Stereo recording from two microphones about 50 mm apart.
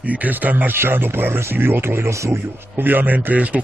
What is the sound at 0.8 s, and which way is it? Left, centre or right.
Speech, right.